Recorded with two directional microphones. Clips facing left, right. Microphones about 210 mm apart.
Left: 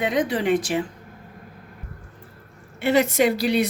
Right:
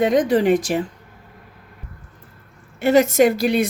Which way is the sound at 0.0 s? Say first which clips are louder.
Right 6 dB; 45° right (ahead or behind).